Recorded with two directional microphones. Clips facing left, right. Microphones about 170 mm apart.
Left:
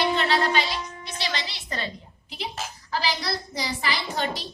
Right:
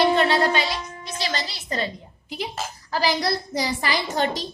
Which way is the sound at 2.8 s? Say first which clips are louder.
Right 5 dB; 40° right (ahead or behind).